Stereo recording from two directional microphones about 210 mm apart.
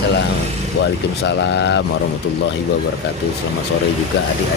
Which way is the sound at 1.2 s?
55° left (ahead or behind).